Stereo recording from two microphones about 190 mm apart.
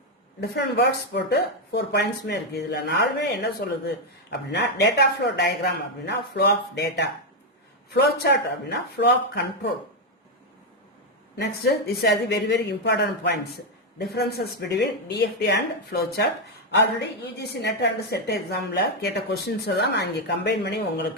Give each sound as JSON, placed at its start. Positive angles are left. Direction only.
{"t": 0.3, "sound": "a woman's voice", "side_deg": 60}
{"t": 11.6, "sound": "a woman's voice", "side_deg": 60}